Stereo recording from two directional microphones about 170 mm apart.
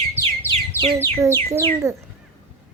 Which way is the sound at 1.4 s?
15° right (ahead or behind).